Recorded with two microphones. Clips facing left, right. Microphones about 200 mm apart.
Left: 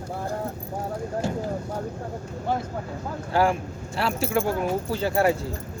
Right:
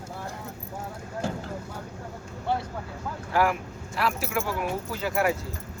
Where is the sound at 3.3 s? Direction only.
30° left (ahead or behind).